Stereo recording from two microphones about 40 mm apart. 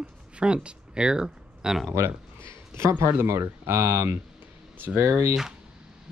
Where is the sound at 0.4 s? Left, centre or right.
Right.